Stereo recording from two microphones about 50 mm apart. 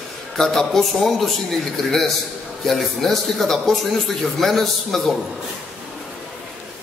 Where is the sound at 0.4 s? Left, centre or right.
Centre.